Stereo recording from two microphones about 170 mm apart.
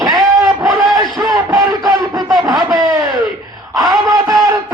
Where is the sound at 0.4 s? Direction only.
20° right (ahead or behind).